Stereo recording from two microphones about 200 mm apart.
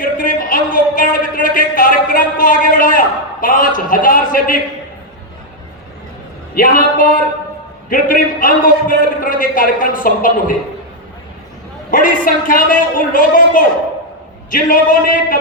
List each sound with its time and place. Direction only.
0.0 s a man's voice: 45° left (ahead or behind)
6.6 s a man's voice: 45° left (ahead or behind)
11.9 s a man's voice: 45° left (ahead or behind)